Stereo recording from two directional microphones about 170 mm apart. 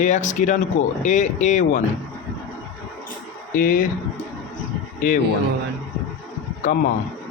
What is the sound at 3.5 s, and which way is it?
Speech, 50° left (ahead or behind).